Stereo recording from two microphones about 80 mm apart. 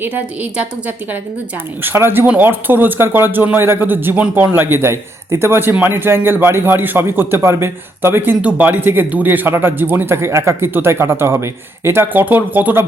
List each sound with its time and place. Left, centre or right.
0.5 s a woman's voice: centre
1.8 s a man's voice: right